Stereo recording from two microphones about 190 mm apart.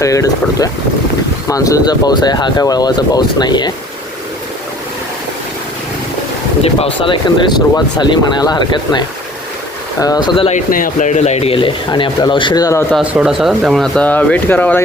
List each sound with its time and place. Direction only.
0.0 s speech: 15° left (ahead or behind)
6.7 s speech: 30° left (ahead or behind)
10.7 s speech: 45° left (ahead or behind); by 12.8 s 20° left (ahead or behind)
12.9 s speech: 5° right (ahead or behind)